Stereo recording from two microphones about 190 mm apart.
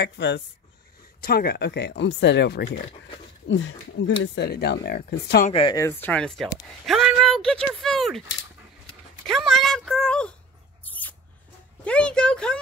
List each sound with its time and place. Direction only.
0.0 s speech: 65° left (ahead or behind)
1.2 s speech: 55° left (ahead or behind)
3.4 s speech: 80° left
4.2 s speech: 60° left (ahead or behind)
5.5 s speech: 30° left (ahead or behind)
5.8 s speech: 10° left (ahead or behind)
9.2 s speech: centre (ahead or behind)
10.8 s rodents: 10° left (ahead or behind)
11.8 s speech: 5° left (ahead or behind)